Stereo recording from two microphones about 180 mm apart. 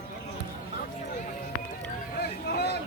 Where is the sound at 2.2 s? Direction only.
65° left (ahead or behind).